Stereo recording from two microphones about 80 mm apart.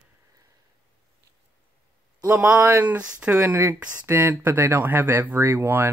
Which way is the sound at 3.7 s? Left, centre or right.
Centre.